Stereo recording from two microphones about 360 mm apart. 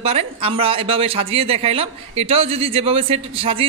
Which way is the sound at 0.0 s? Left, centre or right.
Centre.